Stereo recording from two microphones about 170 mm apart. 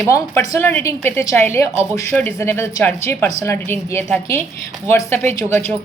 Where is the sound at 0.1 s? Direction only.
15° left (ahead or behind).